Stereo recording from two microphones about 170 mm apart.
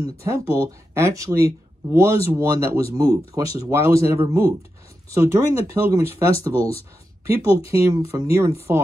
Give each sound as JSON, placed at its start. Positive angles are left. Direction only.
{"t": 0.0, "sound": "speech", "side_deg": -15}
{"t": 7.7, "sound": "speech", "side_deg": -15}